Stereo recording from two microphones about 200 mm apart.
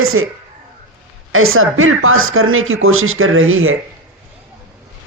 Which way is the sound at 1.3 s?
90° right.